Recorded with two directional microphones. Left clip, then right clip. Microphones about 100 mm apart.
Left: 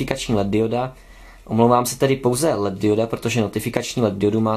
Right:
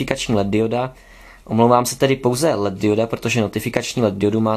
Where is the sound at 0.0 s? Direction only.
35° right (ahead or behind).